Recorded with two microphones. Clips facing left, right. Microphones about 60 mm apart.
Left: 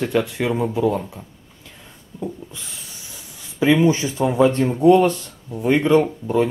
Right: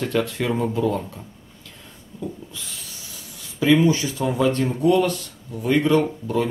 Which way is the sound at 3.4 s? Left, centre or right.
Left.